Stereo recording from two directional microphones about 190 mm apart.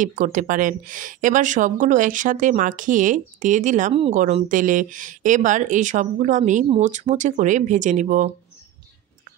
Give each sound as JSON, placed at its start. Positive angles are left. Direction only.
{"t": 0.0, "sound": "speech", "side_deg": -45}